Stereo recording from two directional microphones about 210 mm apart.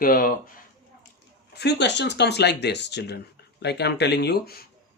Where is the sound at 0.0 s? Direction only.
40° left (ahead or behind).